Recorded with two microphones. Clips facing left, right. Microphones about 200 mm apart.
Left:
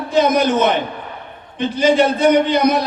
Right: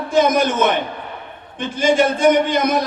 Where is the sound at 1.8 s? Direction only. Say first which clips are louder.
Left 1 dB; 50° right (ahead or behind).